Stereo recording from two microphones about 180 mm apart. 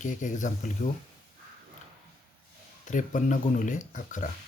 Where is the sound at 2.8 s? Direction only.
45° left (ahead or behind).